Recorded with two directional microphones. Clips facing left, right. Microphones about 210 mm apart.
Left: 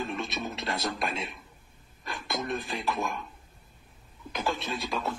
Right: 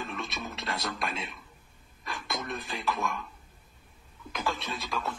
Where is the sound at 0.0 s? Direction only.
30° left (ahead or behind).